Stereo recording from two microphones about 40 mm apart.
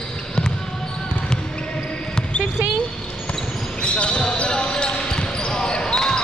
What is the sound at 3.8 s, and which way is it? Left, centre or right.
Basketball bounce, left.